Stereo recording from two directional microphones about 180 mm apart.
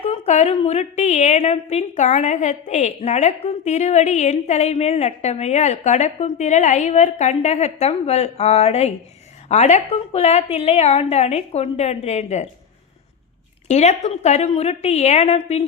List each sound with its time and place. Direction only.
0.0 s a woman's voice: 35° left (ahead or behind)
13.7 s a woman's voice: 40° left (ahead or behind)